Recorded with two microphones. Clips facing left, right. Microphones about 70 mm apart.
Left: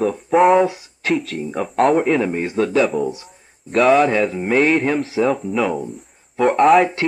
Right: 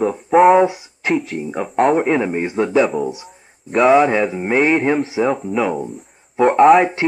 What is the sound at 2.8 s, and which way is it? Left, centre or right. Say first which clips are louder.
Speech: right 1 dB; centre.